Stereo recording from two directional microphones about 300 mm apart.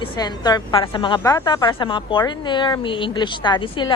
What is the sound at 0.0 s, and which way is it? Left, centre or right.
A woman's voice, centre.